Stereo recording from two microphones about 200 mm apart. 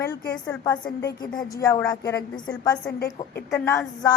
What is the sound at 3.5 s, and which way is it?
Speech, 10° left (ahead or behind).